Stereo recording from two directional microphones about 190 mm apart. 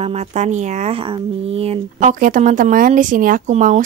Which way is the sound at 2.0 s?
45° right (ahead or behind).